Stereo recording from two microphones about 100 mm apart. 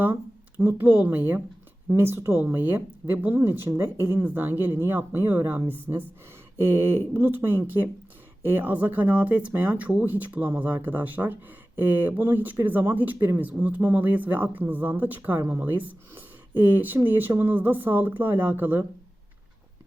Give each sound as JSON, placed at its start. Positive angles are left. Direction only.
{"t": 0.6, "sound": "speech", "side_deg": -20}